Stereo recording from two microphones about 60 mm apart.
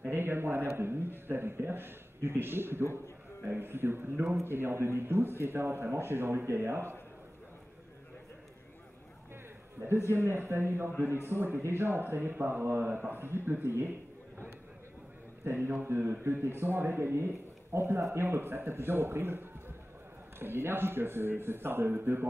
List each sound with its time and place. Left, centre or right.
0.1 s a man's voice: right
9.8 s a man's voice: right
15.4 s a man's voice: right